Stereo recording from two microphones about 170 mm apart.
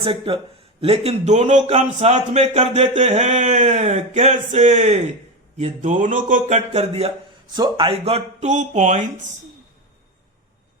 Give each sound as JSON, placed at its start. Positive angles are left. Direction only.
{"t": 0.0, "sound": "a man's voice", "side_deg": -35}
{"t": 6.5, "sound": "speech", "side_deg": -40}
{"t": 7.5, "sound": "speech", "side_deg": -25}